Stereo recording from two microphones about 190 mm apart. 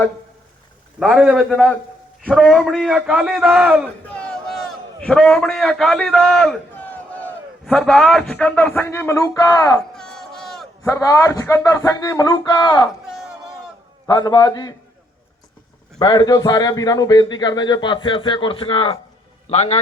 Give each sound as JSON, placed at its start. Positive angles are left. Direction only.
{"t": 0.9, "sound": "a man's voice", "side_deg": 0}
{"t": 9.9, "sound": "a sound", "side_deg": 5}
{"t": 10.8, "sound": "speech", "side_deg": 15}
{"t": 13.1, "sound": "a sound", "side_deg": 0}
{"t": 14.1, "sound": "a man's voice", "side_deg": 20}
{"t": 16.0, "sound": "a man's voice", "side_deg": 20}